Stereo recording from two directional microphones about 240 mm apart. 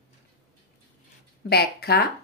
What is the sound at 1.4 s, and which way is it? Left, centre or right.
Speech, left.